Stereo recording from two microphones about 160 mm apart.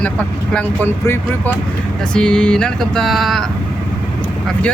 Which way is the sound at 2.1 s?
5° left (ahead or behind).